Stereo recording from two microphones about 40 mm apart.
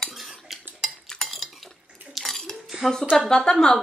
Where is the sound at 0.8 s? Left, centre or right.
Centre.